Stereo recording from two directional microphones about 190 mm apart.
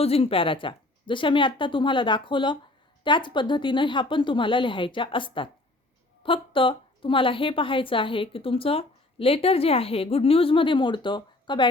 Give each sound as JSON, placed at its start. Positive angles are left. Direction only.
{"t": 0.0, "sound": "a woman's voice", "side_deg": 30}